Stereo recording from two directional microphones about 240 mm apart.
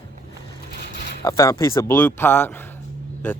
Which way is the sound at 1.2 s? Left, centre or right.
Centre.